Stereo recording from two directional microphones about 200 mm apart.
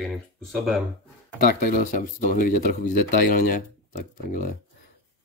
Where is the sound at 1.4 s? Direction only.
45° left (ahead or behind).